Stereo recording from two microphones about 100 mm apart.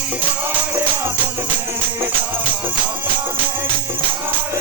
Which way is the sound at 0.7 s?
25° right (ahead or behind).